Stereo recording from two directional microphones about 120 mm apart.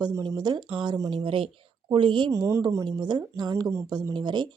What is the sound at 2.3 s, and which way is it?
Speech, 30° right (ahead or behind).